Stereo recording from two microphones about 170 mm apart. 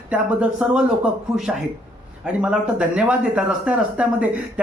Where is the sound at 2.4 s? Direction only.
5° right (ahead or behind).